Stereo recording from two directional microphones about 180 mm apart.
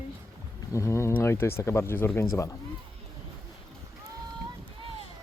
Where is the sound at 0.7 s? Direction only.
15° left (ahead or behind).